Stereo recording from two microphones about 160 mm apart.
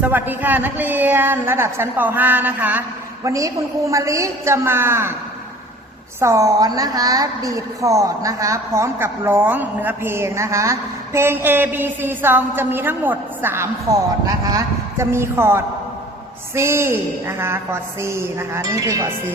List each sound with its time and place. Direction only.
0.0 s a woman's voice: 10° right (ahead or behind)
6.1 s a woman's voice: 20° right (ahead or behind)